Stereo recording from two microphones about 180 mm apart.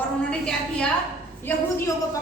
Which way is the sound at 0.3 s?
5° left (ahead or behind).